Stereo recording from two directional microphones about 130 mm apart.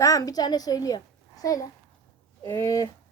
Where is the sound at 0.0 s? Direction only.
25° left (ahead or behind).